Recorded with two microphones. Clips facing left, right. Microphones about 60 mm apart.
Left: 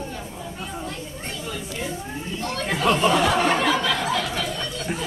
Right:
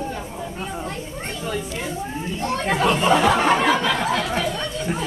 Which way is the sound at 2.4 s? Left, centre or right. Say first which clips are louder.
Right 5 dB; right.